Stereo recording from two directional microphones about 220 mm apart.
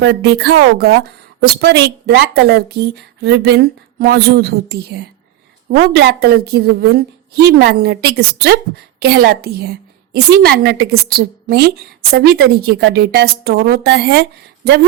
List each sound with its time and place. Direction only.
0.0 s a woman's voice: 50° right (ahead or behind)